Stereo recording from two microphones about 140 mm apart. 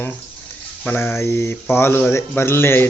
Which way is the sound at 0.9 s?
15° left (ahead or behind).